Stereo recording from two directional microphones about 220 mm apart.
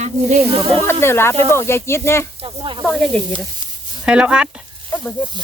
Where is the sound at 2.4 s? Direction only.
20° right (ahead or behind).